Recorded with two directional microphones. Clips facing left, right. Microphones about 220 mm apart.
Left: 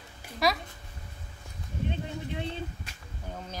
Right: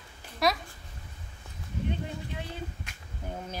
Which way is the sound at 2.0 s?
20° left (ahead or behind).